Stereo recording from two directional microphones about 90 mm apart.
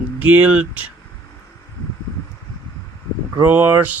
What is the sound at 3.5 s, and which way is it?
Speech, 20° right (ahead or behind).